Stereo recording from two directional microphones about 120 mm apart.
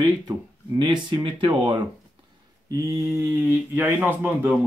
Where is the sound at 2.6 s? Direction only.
30° right (ahead or behind).